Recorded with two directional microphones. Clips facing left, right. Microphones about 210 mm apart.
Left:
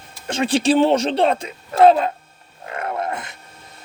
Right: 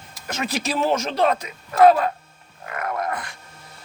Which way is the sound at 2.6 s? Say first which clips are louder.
Left 2 dB; 30° left (ahead or behind).